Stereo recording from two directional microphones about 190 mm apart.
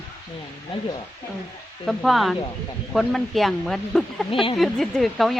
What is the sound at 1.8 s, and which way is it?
A woman's voice, centre (ahead or behind).